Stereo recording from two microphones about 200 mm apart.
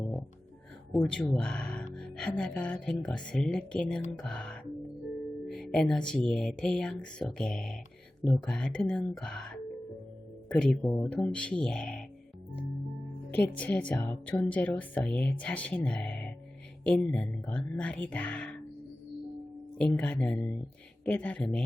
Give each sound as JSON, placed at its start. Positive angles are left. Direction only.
{"t": 0.9, "sound": "speech", "side_deg": 0}
{"t": 13.3, "sound": "speech", "side_deg": 10}
{"t": 19.8, "sound": "speech", "side_deg": 5}